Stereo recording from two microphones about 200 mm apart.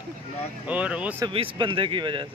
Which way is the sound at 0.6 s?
5° right (ahead or behind).